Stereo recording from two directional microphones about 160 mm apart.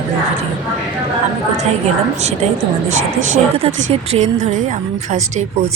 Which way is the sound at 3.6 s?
45° right (ahead or behind).